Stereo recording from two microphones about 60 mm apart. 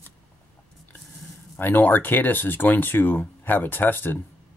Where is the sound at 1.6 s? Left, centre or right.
Left.